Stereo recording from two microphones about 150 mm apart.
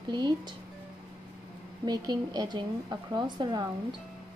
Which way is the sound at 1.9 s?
25° right (ahead or behind).